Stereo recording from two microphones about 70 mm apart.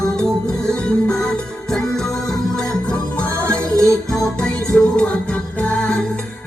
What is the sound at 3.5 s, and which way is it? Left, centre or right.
Music, right.